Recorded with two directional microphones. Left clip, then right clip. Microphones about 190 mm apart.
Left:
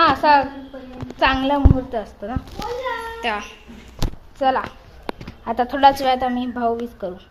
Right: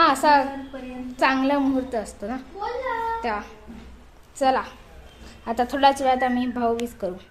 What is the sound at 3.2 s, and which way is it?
A woman's voice, centre (ahead or behind).